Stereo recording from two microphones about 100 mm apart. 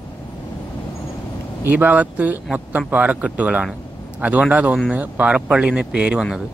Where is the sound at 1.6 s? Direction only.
15° right (ahead or behind).